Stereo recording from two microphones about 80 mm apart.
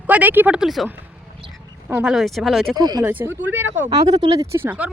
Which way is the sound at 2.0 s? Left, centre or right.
Centre.